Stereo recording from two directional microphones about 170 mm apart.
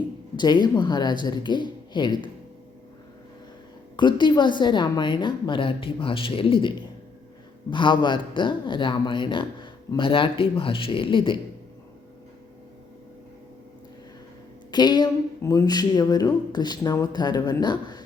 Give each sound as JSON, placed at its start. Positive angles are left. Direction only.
{"t": 0.3, "sound": "speech", "side_deg": 25}
{"t": 3.9, "sound": "speech", "side_deg": 25}
{"t": 14.7, "sound": "speech", "side_deg": 25}